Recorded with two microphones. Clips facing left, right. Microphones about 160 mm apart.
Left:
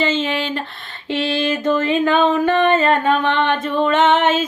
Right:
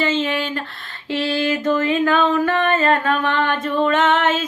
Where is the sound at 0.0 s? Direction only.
20° left (ahead or behind).